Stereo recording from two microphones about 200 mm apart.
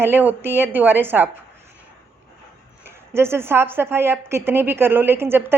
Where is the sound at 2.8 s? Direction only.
10° right (ahead or behind).